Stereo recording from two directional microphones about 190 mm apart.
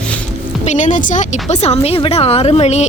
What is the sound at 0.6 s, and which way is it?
Speech, 40° left (ahead or behind).